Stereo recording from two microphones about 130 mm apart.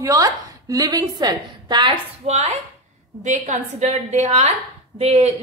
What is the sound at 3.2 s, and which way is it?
A woman's voice, 70° right (ahead or behind).